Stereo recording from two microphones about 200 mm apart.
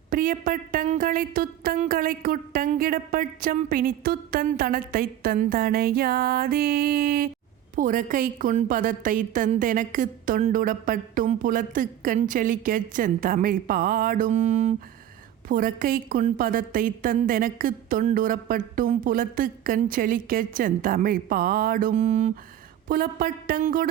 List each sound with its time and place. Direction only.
0.1 s a woman's voice: 40° right (ahead or behind)
22.9 s a woman's voice: 45° right (ahead or behind)